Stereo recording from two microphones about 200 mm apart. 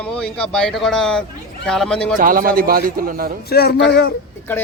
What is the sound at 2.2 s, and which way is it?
A man's voice, 45° right (ahead or behind).